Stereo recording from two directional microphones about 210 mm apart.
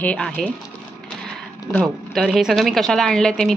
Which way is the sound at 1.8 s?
Centre (ahead or behind).